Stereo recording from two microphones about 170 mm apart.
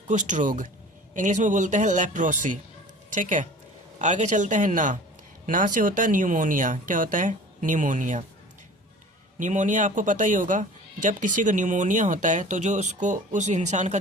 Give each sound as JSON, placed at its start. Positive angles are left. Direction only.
{"t": 0.1, "sound": "speech", "side_deg": -45}
{"t": 9.4, "sound": "speech", "side_deg": -50}